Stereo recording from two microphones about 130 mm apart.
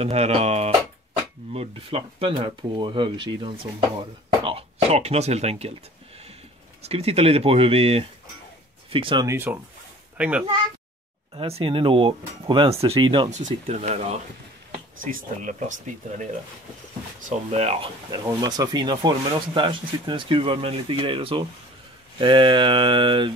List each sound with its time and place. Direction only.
0.0 s speech: 55° right (ahead or behind); by 3.5 s 35° right (ahead or behind)
4.5 s speech: 50° right (ahead or behind)
6.8 s speech: 50° right (ahead or behind)
9.2 s speech: 20° right (ahead or behind)
11.3 s speech: 45° right (ahead or behind)
13.7 s speech: 55° right (ahead or behind)
15.0 s speech: 90° right
17.3 s speech: 55° right (ahead or behind)
18.1 s speech: 30° right (ahead or behind)